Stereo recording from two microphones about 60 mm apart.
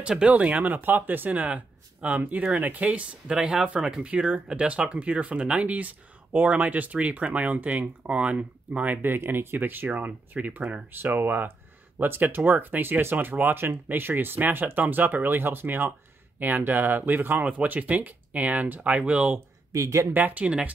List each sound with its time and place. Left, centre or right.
0.2 s speech: right
17.5 s speech: right
19.7 s speech: right
20.1 s speech: right
20.4 s speech: centre